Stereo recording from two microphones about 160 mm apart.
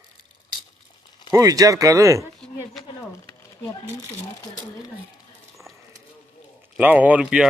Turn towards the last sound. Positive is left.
turn(degrees=-10)  # may be behind; listen again after turning